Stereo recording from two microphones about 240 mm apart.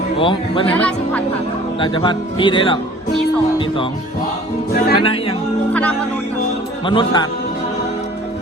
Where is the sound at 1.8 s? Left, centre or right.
Centre.